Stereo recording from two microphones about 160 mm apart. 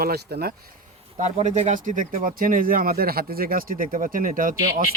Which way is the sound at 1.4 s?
45° right (ahead or behind).